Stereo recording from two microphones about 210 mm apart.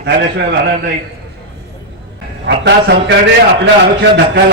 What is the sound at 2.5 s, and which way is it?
Speech, 55° right (ahead or behind).